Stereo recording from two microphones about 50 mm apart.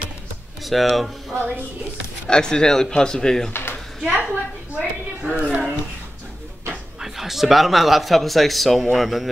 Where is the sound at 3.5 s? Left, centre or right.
Left.